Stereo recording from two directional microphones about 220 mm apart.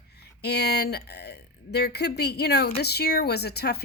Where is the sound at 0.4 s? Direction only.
50° left (ahead or behind).